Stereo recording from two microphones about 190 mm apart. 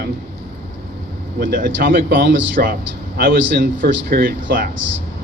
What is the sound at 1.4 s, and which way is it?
A man's voice, 45° right (ahead or behind).